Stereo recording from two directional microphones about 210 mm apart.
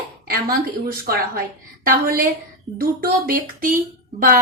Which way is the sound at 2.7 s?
45° right (ahead or behind).